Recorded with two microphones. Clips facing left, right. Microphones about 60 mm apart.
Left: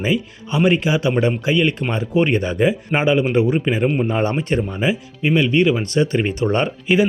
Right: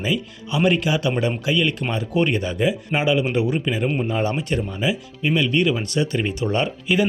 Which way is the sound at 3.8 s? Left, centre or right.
Centre.